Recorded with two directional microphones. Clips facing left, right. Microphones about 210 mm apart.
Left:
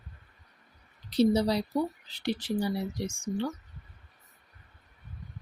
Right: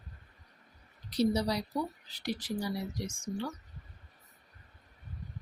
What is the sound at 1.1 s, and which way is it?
Speech, 25° left (ahead or behind).